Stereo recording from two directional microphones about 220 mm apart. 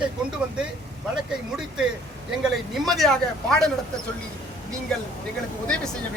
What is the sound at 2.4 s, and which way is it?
A man's voice, centre (ahead or behind).